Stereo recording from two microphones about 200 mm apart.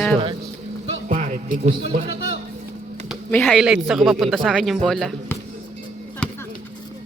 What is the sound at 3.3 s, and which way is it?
Speech, 5° left (ahead or behind).